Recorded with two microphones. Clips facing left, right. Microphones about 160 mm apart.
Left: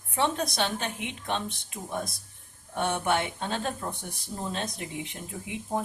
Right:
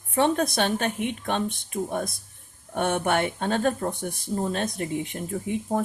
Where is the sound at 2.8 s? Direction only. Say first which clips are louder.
Right 4 dB; 55° right (ahead or behind).